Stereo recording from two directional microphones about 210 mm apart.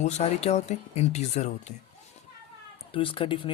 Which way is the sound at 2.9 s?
25° left (ahead or behind).